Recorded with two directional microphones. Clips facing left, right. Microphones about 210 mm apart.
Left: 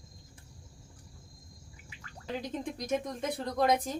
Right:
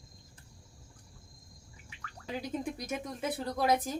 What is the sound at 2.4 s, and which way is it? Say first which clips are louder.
Speech: even; 10° right (ahead or behind).